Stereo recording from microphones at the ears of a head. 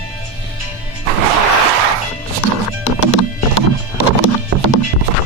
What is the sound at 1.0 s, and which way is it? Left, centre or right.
Music, right.